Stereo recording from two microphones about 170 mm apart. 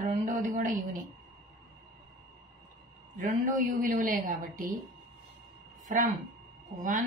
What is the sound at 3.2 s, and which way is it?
A woman's voice, 55° right (ahead or behind).